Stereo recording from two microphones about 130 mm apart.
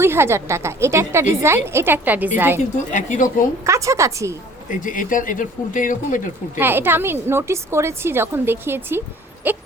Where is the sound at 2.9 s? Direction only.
75° left (ahead or behind).